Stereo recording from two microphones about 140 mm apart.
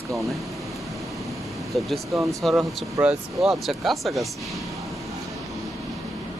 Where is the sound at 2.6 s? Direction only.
15° right (ahead or behind).